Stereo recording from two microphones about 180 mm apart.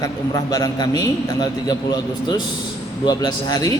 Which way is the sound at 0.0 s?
20° left (ahead or behind).